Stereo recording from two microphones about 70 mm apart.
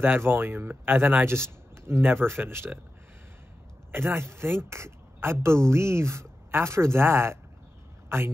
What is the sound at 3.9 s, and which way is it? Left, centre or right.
A man's voice, right.